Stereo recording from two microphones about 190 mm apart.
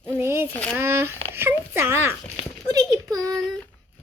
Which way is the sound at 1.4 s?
10° right (ahead or behind).